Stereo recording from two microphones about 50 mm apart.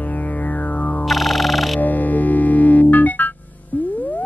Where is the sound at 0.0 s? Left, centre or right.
Left.